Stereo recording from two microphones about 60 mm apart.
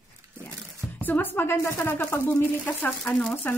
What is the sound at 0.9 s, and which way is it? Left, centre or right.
Speech, left.